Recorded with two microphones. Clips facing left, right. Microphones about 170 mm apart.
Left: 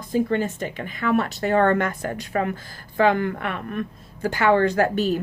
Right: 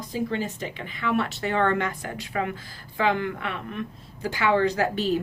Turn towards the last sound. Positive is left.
turn(degrees=50)  # may be behind; listen again after turning